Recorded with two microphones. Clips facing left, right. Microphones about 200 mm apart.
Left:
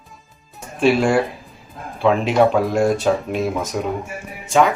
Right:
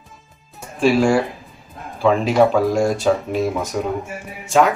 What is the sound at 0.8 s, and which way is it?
Speech, centre (ahead or behind).